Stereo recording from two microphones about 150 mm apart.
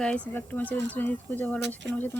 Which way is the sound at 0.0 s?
10° left (ahead or behind).